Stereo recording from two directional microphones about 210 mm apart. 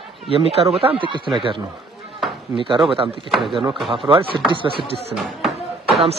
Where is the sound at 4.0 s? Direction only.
25° right (ahead or behind).